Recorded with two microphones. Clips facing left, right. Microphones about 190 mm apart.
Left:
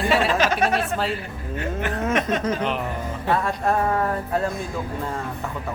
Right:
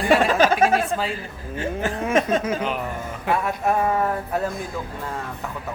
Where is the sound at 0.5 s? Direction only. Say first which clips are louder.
Right 3 dB; 10° right (ahead or behind).